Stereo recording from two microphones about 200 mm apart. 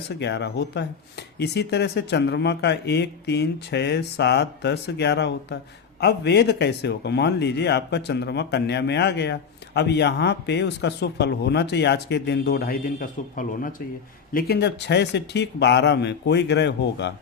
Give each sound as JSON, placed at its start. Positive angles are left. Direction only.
{"t": 0.2, "sound": "speech", "side_deg": 60}